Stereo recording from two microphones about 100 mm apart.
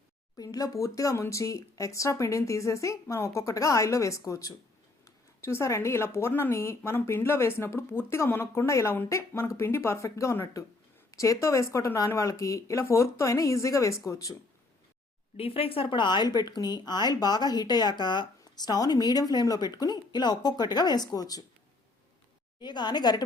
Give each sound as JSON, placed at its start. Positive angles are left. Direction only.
{"t": 0.3, "sound": "speech", "side_deg": 40}
{"t": 15.4, "sound": "speech", "side_deg": 70}
{"t": 22.6, "sound": "speech", "side_deg": 45}